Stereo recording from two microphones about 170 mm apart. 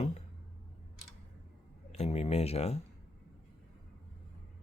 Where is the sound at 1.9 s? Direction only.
40° left (ahead or behind).